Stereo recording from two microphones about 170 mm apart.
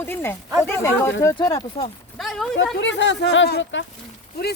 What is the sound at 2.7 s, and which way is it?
Speech, 90° left.